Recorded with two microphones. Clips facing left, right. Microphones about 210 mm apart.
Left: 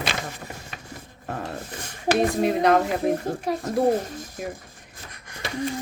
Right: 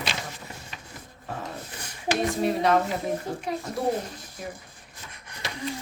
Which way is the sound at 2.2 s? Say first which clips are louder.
Left 3 dB; 50° left (ahead or behind).